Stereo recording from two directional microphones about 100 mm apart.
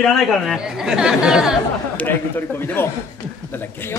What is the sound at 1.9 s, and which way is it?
A man's voice, 20° left (ahead or behind).